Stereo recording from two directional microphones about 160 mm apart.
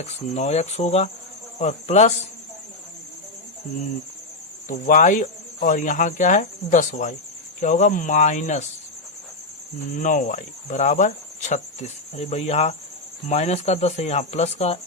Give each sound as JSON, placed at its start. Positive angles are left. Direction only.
{"t": 0.0, "sound": "speech", "side_deg": 45}
{"t": 4.9, "sound": "speech", "side_deg": 55}
{"t": 10.0, "sound": "speech", "side_deg": 55}